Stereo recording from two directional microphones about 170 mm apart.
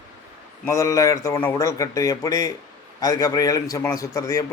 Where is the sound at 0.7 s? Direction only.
20° left (ahead or behind).